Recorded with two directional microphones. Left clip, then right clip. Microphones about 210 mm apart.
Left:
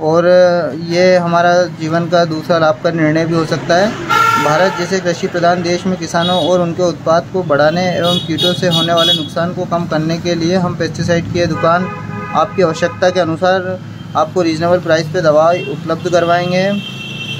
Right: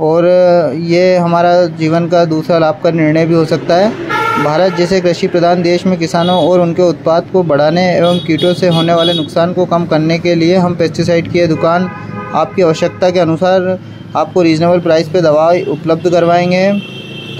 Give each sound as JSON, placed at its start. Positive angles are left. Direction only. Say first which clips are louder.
{"t": 0.0, "sound": "speech", "louder": "right 1 dB", "side_deg": -15}